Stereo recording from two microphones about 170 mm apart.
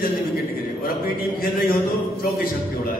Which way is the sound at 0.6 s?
60° left (ahead or behind).